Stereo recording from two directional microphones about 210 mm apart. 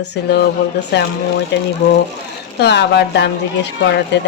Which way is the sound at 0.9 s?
55° left (ahead or behind).